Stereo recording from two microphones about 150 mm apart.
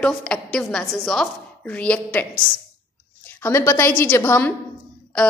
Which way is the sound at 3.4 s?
15° left (ahead or behind).